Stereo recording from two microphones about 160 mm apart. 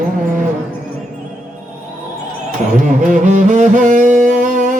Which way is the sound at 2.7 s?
50° right (ahead or behind).